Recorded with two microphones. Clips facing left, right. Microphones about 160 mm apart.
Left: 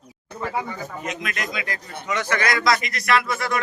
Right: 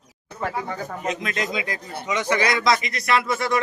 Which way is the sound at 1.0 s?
30° right (ahead or behind).